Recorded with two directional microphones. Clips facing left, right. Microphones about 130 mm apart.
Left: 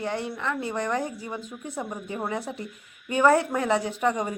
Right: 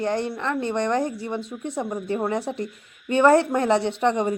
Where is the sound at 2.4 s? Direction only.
40° right (ahead or behind).